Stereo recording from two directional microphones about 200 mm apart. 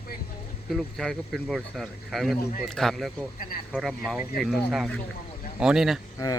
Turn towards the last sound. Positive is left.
turn(degrees=15)  # may be behind; listen again after turning